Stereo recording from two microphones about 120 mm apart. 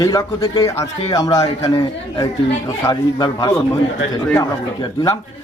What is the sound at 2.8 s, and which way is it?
Speech, 35° left (ahead or behind).